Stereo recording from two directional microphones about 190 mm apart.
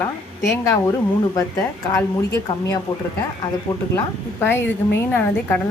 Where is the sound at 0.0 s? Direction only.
15° left (ahead or behind).